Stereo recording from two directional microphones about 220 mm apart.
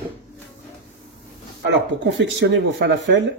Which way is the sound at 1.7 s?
55° right (ahead or behind).